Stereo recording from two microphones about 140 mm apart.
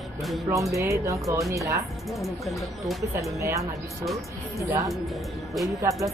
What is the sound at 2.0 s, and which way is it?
Speech, centre (ahead or behind).